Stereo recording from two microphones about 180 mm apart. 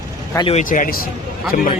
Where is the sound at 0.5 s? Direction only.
45° left (ahead or behind).